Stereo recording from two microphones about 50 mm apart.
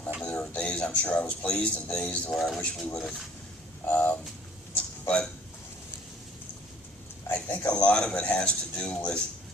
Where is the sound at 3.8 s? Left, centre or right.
Left.